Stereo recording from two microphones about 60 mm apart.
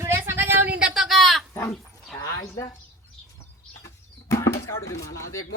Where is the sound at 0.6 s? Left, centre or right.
Centre.